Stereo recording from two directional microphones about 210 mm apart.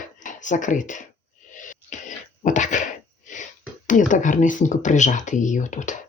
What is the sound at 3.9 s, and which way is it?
Speech, 40° left (ahead or behind).